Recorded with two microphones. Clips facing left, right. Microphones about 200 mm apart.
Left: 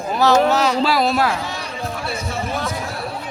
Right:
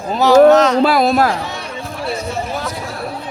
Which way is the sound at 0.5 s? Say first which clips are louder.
Right 7 dB; 10° left (ahead or behind).